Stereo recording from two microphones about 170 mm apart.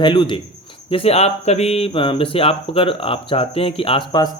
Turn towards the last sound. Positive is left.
turn(degrees=25)  # may be behind; listen again after turning